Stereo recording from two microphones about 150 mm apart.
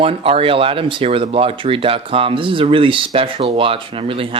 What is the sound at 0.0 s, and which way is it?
Speech, 40° right (ahead or behind).